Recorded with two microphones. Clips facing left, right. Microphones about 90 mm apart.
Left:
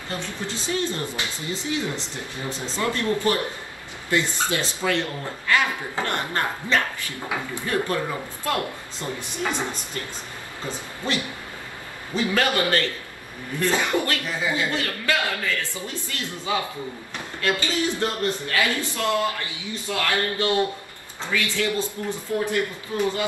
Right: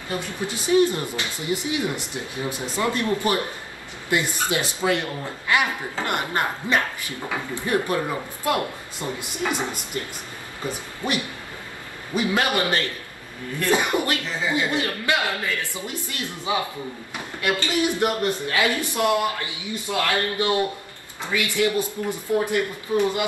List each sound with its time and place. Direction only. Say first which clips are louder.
0.1 s speech: right 3 dB; 15° right (ahead or behind)
9.0 s speech: right 1 dB; 15° right (ahead or behind)